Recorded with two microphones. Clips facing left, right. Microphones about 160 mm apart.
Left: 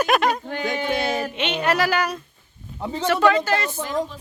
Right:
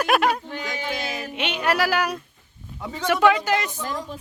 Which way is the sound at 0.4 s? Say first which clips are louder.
Left 5 dB; 55° left (ahead or behind).